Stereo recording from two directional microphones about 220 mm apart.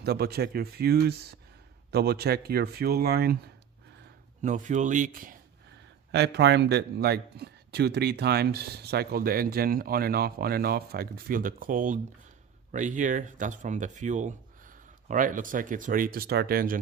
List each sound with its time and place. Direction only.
0.0 s speech: 45° right (ahead or behind)
4.4 s speech: 35° right (ahead or behind)
6.1 s speech: 50° right (ahead or behind)